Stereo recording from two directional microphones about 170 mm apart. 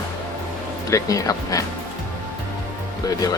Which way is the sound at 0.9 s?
20° left (ahead or behind).